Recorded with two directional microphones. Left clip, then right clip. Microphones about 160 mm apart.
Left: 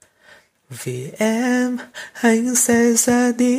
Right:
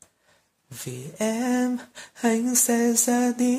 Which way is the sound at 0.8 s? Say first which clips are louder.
Left 7 dB; 25° left (ahead or behind).